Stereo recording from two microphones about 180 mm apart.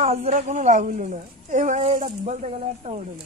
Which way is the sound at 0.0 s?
40° right (ahead or behind).